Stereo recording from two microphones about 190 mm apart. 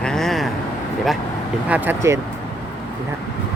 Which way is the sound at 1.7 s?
10° right (ahead or behind).